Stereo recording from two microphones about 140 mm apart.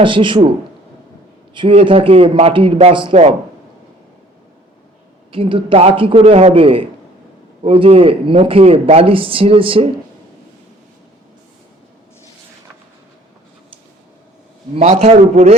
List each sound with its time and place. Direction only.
0.0 s a man's voice: 35° right (ahead or behind)
1.5 s a man's voice: 40° right (ahead or behind)
5.3 s a man's voice: 40° right (ahead or behind)
14.8 s a man's voice: 50° right (ahead or behind)